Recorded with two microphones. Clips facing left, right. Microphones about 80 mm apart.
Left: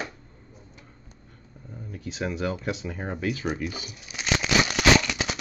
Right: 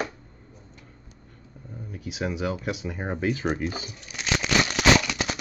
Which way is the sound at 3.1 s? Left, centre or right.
Right.